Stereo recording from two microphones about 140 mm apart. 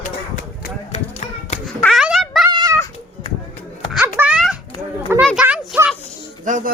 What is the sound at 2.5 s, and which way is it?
Cat, 35° right (ahead or behind).